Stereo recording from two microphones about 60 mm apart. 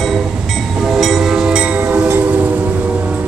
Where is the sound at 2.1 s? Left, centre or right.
Right.